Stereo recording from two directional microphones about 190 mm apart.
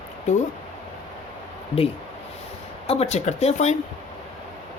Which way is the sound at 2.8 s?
30° left (ahead or behind).